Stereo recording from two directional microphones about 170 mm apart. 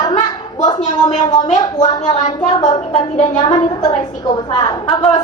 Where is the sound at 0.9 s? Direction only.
45° left (ahead or behind).